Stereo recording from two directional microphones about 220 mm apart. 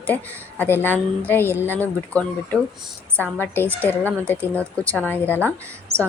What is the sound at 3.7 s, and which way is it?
Speech, 5° left (ahead or behind).